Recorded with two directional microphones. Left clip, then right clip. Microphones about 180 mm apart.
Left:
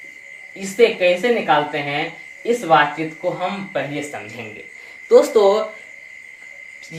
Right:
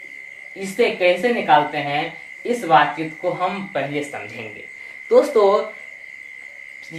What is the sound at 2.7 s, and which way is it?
Speech, centre (ahead or behind).